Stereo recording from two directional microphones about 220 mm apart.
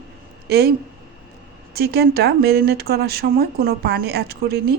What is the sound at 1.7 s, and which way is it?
Speech, 45° right (ahead or behind).